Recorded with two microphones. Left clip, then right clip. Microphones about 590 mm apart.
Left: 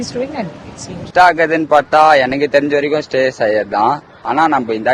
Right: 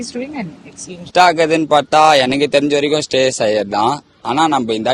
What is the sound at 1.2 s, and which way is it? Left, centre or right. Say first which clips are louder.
A man's voice: left 1 dB; right.